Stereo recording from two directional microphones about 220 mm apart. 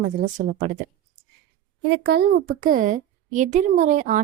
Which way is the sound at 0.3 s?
40° right (ahead or behind).